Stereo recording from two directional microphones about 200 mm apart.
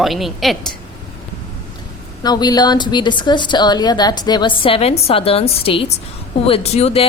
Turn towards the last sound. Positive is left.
turn(degrees=30)  # may be behind; listen again after turning